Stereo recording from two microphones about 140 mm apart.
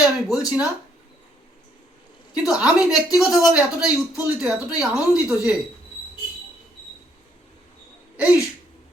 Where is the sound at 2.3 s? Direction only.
5° right (ahead or behind).